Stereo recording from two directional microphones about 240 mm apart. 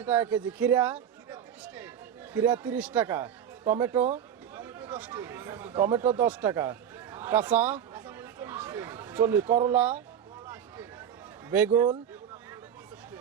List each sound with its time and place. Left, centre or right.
0.0 s speech: centre
11.7 s speech: centre